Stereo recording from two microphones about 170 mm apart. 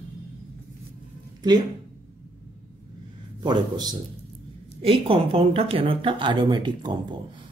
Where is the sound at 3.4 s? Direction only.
25° right (ahead or behind).